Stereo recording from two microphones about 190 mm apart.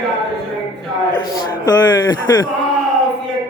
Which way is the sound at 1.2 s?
20° left (ahead or behind).